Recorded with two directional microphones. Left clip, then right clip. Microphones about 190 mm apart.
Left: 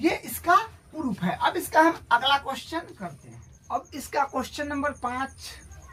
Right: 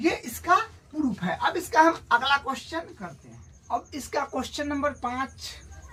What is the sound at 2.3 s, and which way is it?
Speech, 20° left (ahead or behind).